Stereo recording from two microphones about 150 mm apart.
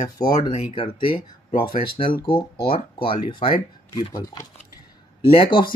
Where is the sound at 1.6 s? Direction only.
30° left (ahead or behind).